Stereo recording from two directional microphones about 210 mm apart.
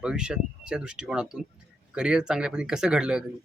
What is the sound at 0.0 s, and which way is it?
Speech, 5° right (ahead or behind).